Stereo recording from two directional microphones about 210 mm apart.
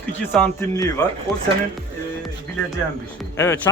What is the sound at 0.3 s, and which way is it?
Speech, 5° left (ahead or behind).